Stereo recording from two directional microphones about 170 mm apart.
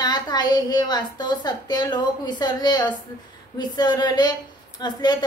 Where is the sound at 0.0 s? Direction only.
25° left (ahead or behind).